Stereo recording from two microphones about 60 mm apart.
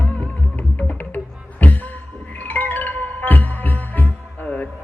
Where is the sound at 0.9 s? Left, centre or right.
Left.